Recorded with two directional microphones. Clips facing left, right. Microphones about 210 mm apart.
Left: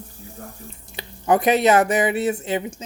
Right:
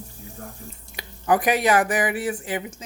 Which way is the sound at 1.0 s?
25° left (ahead or behind).